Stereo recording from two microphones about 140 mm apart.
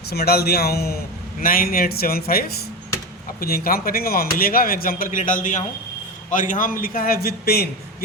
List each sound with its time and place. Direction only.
0.1 s speech: 90° left